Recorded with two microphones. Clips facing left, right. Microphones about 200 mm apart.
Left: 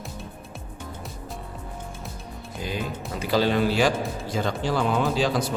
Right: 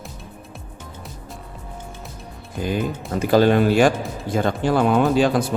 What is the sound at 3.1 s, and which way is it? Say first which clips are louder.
Speech: right 7 dB; 50° right (ahead or behind).